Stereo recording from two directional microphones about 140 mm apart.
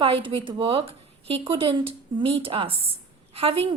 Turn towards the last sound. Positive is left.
turn(degrees=-45)  # may be behind; listen again after turning